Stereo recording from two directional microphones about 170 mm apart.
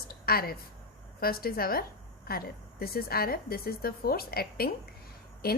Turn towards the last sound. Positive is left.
turn(degrees=65)  # may be behind; listen again after turning